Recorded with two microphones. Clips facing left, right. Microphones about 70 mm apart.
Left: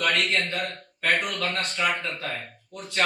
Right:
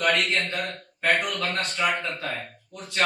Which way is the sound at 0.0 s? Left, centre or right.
Centre.